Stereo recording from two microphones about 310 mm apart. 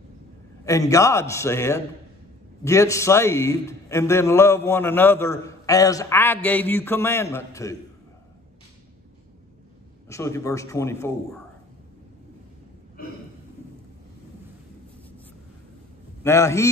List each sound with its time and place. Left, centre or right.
0.7 s a man's voice: centre
10.0 s a man's voice: centre
13.0 s a sound: left
16.3 s a man's voice: centre